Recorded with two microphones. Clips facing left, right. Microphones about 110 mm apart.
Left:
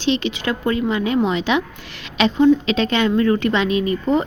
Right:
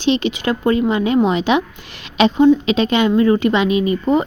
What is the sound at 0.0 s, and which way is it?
A woman's voice, 15° right (ahead or behind).